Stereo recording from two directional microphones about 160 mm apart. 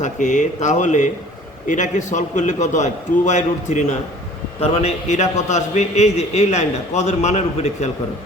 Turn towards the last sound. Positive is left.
turn(degrees=45)  # may be behind; listen again after turning